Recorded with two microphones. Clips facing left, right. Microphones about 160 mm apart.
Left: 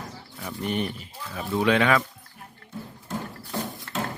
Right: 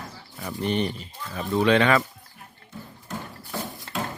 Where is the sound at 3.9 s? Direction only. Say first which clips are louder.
Right 1 dB; 25° right (ahead or behind).